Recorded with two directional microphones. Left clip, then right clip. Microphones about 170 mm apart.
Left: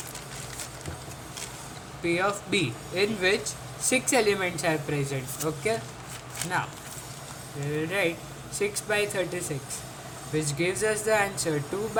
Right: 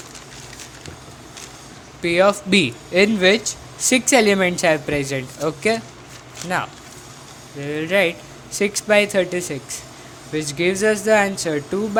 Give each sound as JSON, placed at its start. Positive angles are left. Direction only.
{"t": 2.0, "sound": "speech", "side_deg": -50}
{"t": 7.7, "sound": "speech", "side_deg": -50}